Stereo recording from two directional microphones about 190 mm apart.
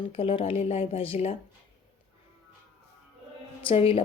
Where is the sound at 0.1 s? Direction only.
30° left (ahead or behind).